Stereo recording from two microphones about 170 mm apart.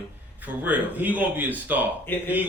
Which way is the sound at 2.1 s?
10° left (ahead or behind).